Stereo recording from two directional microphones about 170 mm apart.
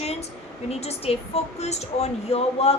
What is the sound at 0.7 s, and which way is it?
A woman's voice, 40° left (ahead or behind).